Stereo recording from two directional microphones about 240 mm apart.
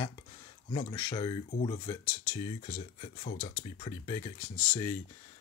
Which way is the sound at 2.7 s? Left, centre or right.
Left.